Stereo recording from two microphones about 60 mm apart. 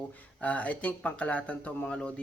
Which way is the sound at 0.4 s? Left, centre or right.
Left.